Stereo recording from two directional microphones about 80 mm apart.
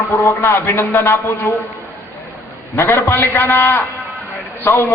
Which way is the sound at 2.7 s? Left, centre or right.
Left.